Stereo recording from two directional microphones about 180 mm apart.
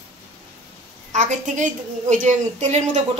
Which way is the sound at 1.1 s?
45° right (ahead or behind).